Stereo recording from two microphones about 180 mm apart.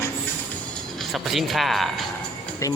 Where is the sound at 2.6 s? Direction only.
15° left (ahead or behind).